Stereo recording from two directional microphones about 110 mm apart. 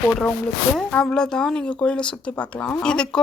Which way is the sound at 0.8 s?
5° left (ahead or behind).